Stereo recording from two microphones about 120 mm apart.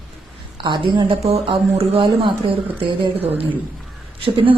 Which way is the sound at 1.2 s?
60° right (ahead or behind).